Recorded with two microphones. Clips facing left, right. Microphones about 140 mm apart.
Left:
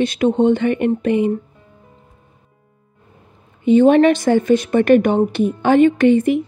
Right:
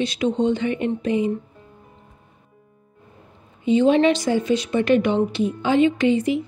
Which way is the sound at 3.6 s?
55° left (ahead or behind).